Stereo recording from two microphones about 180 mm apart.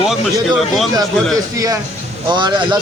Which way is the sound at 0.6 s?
Centre (ahead or behind).